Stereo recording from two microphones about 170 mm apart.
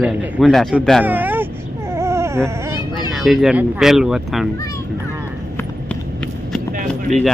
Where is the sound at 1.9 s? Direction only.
15° right (ahead or behind).